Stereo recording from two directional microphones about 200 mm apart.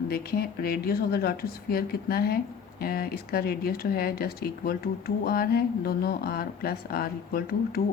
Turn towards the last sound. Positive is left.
turn(degrees=50)  # may be behind; listen again after turning